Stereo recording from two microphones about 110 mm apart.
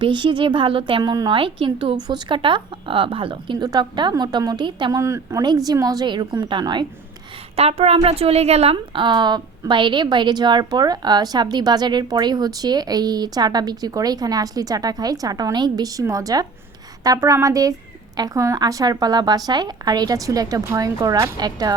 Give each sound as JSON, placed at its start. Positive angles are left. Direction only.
{"t": 0.0, "sound": "a woman's voice", "side_deg": -45}
{"t": 1.0, "sound": "a woman's voice", "side_deg": -35}
{"t": 1.4, "sound": "a woman's voice", "side_deg": -50}
{"t": 4.9, "sound": "a woman's voice", "side_deg": -30}
{"t": 5.4, "sound": "a woman's voice", "side_deg": -35}
{"t": 7.5, "sound": "a woman's voice", "side_deg": -65}